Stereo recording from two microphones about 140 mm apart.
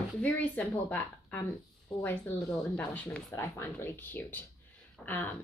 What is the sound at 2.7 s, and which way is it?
Speech, 10° left (ahead or behind).